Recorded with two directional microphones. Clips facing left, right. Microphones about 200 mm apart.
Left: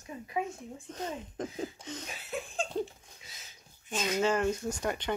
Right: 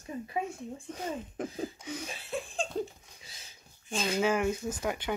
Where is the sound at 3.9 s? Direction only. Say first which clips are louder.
Right 1 dB; 30° right (ahead or behind).